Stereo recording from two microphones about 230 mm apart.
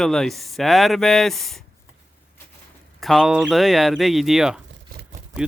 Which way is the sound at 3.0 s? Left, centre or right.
Centre.